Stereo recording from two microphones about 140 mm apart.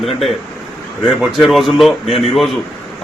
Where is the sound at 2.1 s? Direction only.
45° left (ahead or behind).